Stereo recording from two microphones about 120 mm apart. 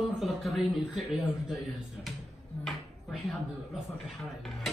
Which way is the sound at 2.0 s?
5° left (ahead or behind).